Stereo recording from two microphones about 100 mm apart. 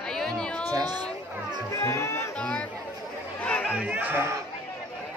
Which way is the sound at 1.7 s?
25° left (ahead or behind).